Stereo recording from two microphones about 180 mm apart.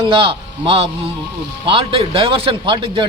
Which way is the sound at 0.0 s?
30° right (ahead or behind).